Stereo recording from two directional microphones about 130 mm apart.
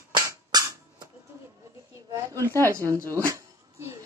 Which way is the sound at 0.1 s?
30° right (ahead or behind).